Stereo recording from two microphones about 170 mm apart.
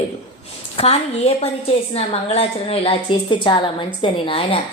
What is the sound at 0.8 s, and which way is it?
A woman's voice, 35° left (ahead or behind).